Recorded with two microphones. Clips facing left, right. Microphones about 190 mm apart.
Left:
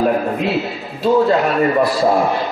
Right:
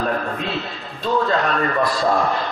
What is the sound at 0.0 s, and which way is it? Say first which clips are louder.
A man's voice: left 7 dB; 15° left (ahead or behind).